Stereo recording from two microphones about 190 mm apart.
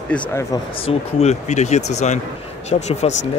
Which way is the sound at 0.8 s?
30° left (ahead or behind).